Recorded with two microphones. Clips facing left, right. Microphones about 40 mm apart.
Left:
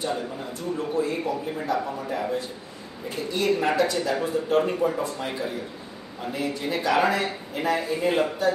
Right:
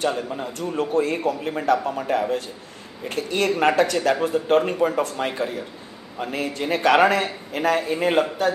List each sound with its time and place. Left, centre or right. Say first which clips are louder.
0.0 s a man's voice: right 4 dB; right